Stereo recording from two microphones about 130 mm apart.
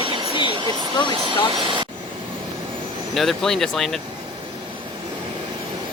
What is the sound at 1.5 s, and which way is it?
Speech, 40° right (ahead or behind).